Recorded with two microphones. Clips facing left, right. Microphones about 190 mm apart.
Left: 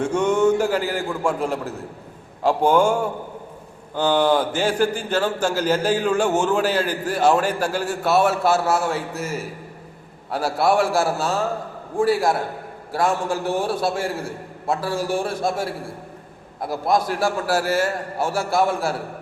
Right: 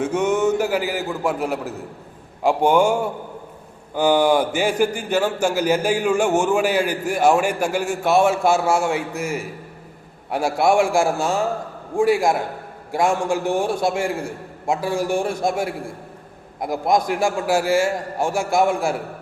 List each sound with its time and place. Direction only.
0.0 s a man's voice: 5° right (ahead or behind)